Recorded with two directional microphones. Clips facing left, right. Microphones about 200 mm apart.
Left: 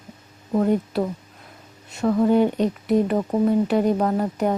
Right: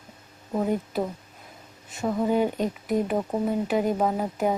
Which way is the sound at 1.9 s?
5° right (ahead or behind).